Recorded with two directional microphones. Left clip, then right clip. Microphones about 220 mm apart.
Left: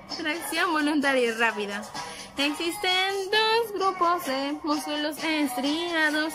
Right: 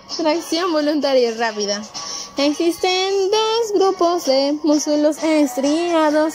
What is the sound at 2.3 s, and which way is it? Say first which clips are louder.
Child singing: right 9 dB; 15° right (ahead or behind).